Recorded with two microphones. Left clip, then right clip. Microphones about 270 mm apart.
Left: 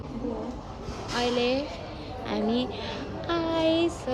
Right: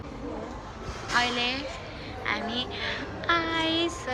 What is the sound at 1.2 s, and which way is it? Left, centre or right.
A woman's voice, centre.